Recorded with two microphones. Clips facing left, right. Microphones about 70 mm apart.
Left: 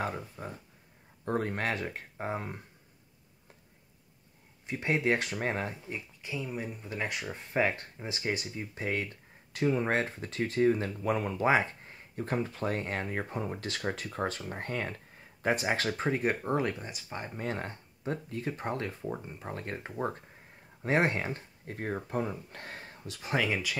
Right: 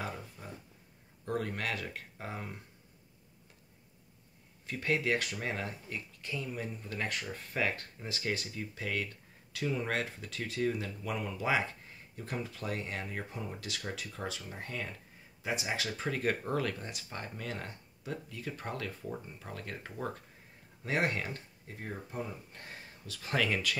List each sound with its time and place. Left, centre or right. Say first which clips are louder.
0.0 s a sound: left 6 dB; left
1.2 s speech: left 4 dB; left
4.6 s speech: left 3 dB; left
6.2 s speech: left 2 dB; centre
7.2 s speech: left 8 dB; left
16.2 s speech: left 3 dB; centre
17.4 s speech: left 5 dB; left
21.6 s speech: left 8 dB; left
23.0 s speech: left 2 dB; centre